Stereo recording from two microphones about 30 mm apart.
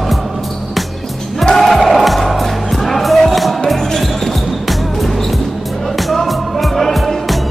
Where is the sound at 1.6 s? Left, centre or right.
Centre.